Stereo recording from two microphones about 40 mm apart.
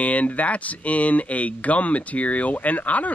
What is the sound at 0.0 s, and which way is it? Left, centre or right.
Speech, left.